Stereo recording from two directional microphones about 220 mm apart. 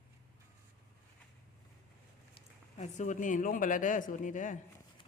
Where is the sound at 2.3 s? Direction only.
30° left (ahead or behind).